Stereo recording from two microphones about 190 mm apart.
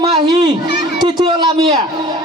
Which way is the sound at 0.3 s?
25° right (ahead or behind).